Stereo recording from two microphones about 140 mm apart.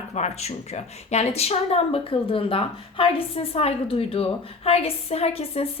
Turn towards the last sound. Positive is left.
turn(degrees=45)  # may be behind; listen again after turning